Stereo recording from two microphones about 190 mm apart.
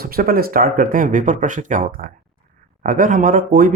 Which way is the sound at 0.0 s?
50° right (ahead or behind).